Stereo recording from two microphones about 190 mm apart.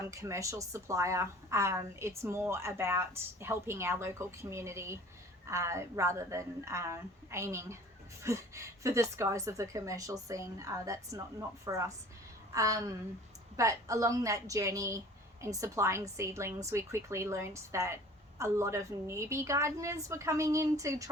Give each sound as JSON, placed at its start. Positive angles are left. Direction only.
{"t": 0.1, "sound": "a woman's voice", "side_deg": -15}